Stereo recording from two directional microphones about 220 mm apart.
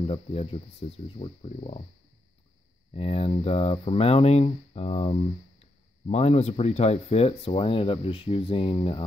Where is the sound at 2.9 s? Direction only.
25° left (ahead or behind).